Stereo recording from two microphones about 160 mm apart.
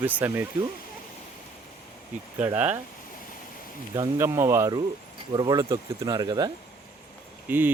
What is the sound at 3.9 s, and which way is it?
Speech, 20° right (ahead or behind).